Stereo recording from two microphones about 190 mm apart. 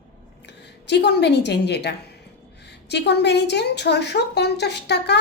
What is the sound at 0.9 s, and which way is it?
A woman's voice, 65° left (ahead or behind).